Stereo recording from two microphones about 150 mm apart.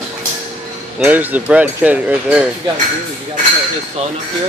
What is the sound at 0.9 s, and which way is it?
Speech, 10° right (ahead or behind).